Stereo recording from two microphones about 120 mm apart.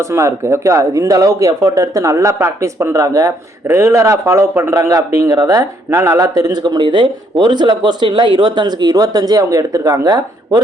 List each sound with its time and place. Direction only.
0.0 s speech: 25° right (ahead or behind)
5.9 s speech: 20° right (ahead or behind)
6.3 s speech: 35° right (ahead or behind)